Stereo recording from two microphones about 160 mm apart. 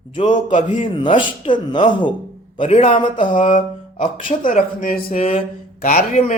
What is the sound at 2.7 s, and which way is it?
Speech, 40° left (ahead or behind).